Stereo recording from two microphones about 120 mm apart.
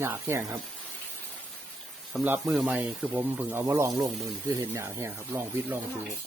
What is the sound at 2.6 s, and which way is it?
Speech, 15° right (ahead or behind).